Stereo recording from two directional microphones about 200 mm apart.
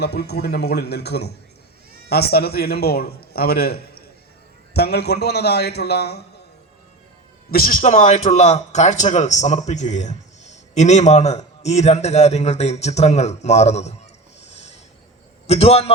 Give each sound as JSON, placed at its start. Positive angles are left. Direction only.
{"t": 0.0, "sound": "a man's voice", "side_deg": 55}
{"t": 7.5, "sound": "speech", "side_deg": 45}
{"t": 14.4, "sound": "a sound", "side_deg": 35}
{"t": 15.4, "sound": "speech", "side_deg": 30}